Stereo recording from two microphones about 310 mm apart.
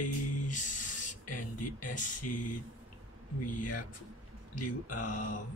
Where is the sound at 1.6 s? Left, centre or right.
Left.